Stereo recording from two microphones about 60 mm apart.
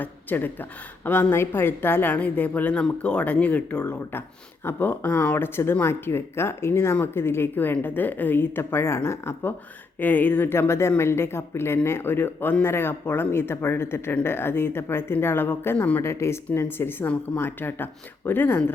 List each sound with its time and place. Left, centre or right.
0.0 s a woman's voice: left
4.6 s a woman's voice: left
10.0 s a woman's voice: left